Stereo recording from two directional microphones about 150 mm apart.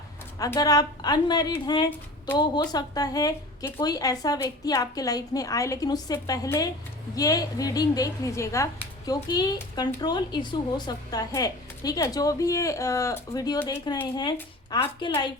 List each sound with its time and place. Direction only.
0.3 s a woman's voice: 25° left (ahead or behind)